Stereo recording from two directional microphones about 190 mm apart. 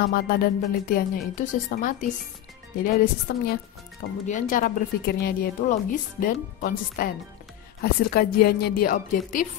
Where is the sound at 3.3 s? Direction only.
60° left (ahead or behind).